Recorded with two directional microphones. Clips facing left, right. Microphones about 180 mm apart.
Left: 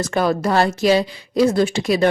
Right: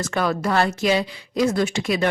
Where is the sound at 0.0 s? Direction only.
35° left (ahead or behind).